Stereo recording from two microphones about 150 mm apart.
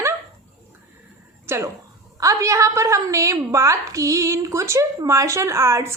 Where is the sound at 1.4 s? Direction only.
15° right (ahead or behind).